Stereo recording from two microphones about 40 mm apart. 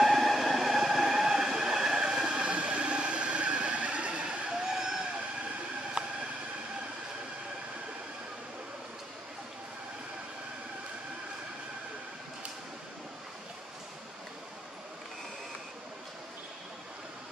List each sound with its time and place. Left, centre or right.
0.0 s train: centre; by 4.3 s right
4.3 s vehicle: centre
6.0 s a sound: right